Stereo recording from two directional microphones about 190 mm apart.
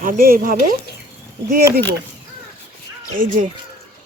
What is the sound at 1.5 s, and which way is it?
Speech, 60° right (ahead or behind).